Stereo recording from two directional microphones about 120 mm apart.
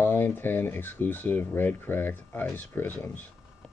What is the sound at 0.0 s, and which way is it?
Speech, 15° left (ahead or behind).